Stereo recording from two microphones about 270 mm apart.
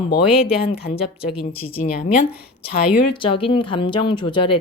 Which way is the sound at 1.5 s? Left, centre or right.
Left.